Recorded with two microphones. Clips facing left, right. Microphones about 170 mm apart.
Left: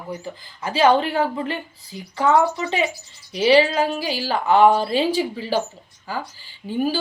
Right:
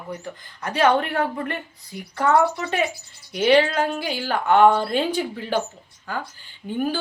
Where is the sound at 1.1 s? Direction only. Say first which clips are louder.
Left 2 dB; 25° left (ahead or behind).